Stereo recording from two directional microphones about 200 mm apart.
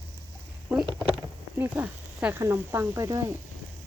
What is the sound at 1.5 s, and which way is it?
Speech, 10° right (ahead or behind).